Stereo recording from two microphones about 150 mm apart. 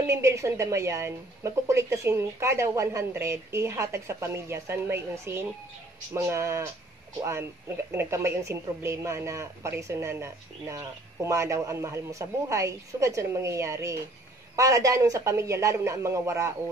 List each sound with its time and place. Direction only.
0.0 s speech: 20° right (ahead or behind)
7.9 s speech: 15° right (ahead or behind)